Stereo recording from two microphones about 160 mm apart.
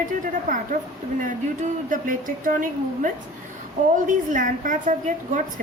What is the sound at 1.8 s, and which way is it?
A woman's voice, 55° right (ahead or behind).